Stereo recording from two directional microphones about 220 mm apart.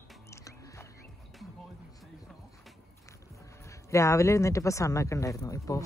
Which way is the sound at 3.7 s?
15° left (ahead or behind).